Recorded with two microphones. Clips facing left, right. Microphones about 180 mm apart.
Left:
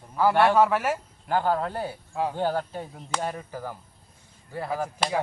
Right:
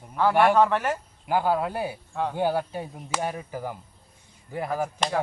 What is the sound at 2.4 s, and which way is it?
Speech, 10° right (ahead or behind).